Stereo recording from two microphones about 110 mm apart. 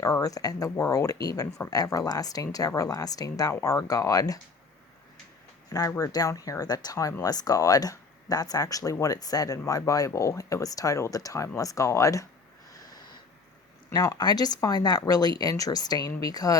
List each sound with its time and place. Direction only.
0.0 s speech: 30° left (ahead or behind)
5.9 s speech: 30° left (ahead or behind)
13.9 s speech: 35° left (ahead or behind)